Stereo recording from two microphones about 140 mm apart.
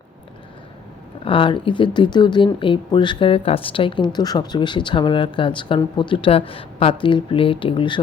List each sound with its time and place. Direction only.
1.2 s speech: 40° left (ahead or behind)